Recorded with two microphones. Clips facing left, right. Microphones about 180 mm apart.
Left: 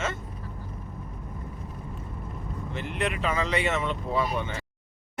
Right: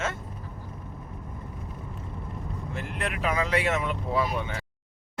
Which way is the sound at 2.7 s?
Centre (ahead or behind).